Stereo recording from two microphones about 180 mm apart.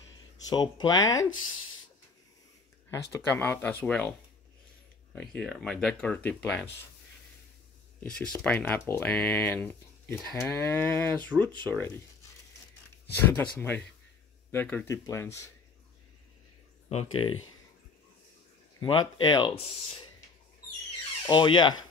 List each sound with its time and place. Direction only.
0.4 s speech: 20° left (ahead or behind)
2.9 s speech: 15° left (ahead or behind)
5.3 s speech: 5° left (ahead or behind)
8.0 s speech: 5° left (ahead or behind)
16.9 s speech: 30° left (ahead or behind)
19.2 s speech: 25° left (ahead or behind)
21.3 s speech: 25° left (ahead or behind)